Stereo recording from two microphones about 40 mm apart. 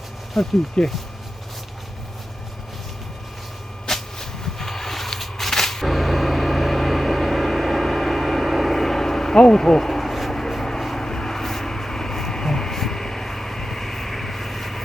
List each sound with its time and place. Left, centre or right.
0.4 s speech: centre
0.8 s speech: centre
3.8 s a sound: centre
10.5 s vehicle: centre